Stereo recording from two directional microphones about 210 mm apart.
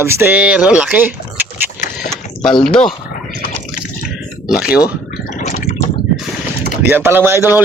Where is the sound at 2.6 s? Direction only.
5° left (ahead or behind).